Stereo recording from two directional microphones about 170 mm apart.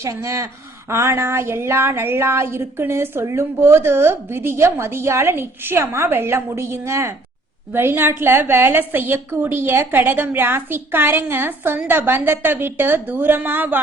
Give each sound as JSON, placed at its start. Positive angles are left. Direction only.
{"t": 0.0, "sound": "speech", "side_deg": -15}